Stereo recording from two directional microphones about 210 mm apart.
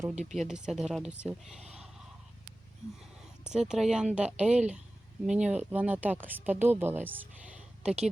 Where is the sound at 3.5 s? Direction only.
5° right (ahead or behind).